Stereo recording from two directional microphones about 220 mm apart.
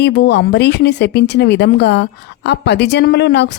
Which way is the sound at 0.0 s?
50° left (ahead or behind).